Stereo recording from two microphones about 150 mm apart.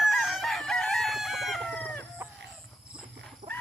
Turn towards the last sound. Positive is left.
turn(degrees=-45)  # may be behind; listen again after turning